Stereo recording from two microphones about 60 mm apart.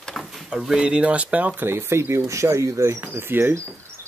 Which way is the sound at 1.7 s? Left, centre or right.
Right.